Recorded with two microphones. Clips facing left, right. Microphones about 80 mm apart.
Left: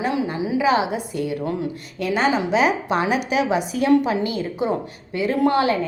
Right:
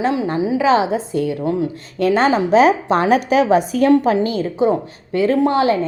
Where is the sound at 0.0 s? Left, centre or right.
Right.